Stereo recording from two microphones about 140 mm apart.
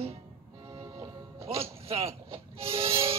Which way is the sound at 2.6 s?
40° right (ahead or behind).